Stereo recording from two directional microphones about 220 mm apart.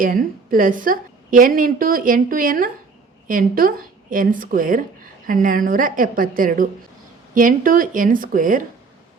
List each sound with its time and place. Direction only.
0.0 s a woman's voice: 40° right (ahead or behind)